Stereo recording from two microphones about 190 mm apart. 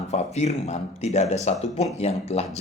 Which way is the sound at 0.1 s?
35° left (ahead or behind).